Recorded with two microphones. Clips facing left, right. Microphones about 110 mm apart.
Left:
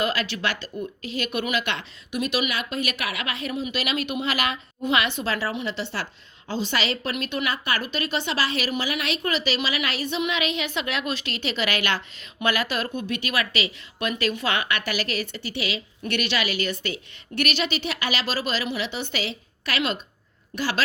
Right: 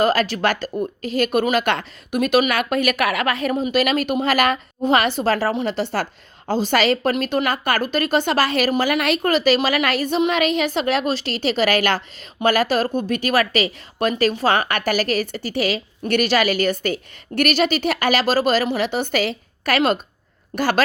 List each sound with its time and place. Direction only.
0.0 s a woman's voice: 40° right (ahead or behind)